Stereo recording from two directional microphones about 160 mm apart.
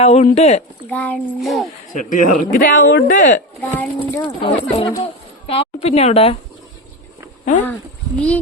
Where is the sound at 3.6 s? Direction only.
10° left (ahead or behind).